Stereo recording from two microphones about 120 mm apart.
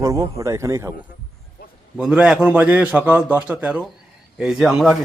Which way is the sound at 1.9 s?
5° right (ahead or behind).